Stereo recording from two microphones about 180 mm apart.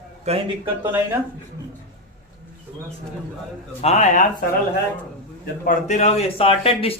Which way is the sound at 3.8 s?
40° left (ahead or behind).